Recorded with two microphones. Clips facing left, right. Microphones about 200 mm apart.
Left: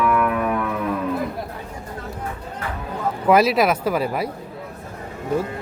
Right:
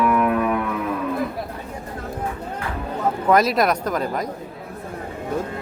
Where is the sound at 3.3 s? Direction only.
5° left (ahead or behind).